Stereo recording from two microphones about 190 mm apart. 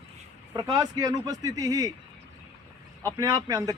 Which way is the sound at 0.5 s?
20° right (ahead or behind).